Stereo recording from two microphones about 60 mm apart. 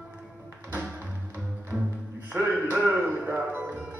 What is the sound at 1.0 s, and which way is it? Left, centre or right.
Music, right.